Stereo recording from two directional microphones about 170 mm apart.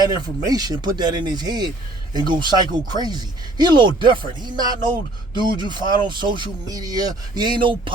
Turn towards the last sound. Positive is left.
turn(degrees=-30)  # may be behind; listen again after turning